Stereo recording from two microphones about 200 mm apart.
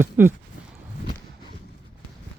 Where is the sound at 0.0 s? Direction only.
10° right (ahead or behind).